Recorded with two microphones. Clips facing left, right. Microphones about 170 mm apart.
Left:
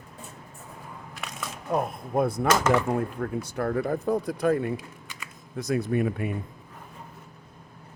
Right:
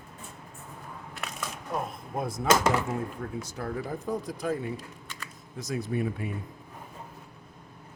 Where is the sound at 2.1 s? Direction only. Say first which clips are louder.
Left 3 dB; 60° left (ahead or behind).